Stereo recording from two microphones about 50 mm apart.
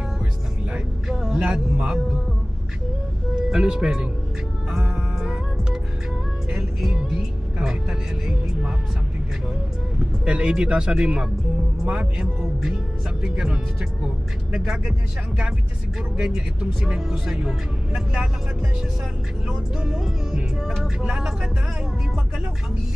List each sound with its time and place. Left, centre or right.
1.0 s music: centre
1.4 s speech: centre
3.3 s speech: centre
4.6 s music: centre
7.5 s speech: centre
9.9 s speech: centre
19.4 s speech: centre